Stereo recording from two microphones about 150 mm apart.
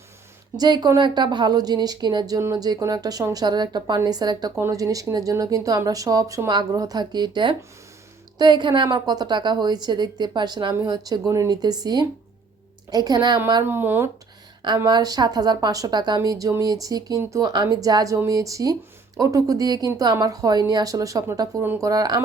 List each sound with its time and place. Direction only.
0.5 s speech: 30° right (ahead or behind)
13.7 s speech: 15° right (ahead or behind)
14.8 s speech: 25° right (ahead or behind)